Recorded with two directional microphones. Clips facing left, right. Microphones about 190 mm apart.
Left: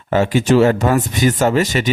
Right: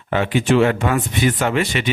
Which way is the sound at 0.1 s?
40° left (ahead or behind).